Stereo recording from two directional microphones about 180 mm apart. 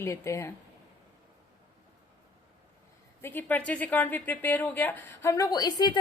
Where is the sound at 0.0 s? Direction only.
15° left (ahead or behind).